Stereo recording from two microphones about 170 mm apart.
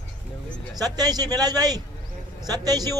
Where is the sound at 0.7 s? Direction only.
20° right (ahead or behind).